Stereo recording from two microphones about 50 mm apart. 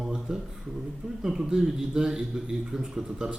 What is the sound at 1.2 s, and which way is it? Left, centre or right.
A man's voice, centre.